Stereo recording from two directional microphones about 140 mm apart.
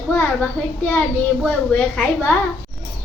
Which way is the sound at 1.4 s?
10° left (ahead or behind).